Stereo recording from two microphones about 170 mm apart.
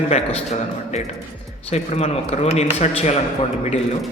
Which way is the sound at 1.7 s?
40° left (ahead or behind).